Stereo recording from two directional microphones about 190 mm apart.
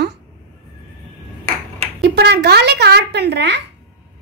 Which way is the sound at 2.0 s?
60° right (ahead or behind).